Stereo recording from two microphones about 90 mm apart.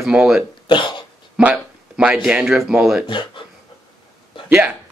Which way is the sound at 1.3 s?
10° right (ahead or behind).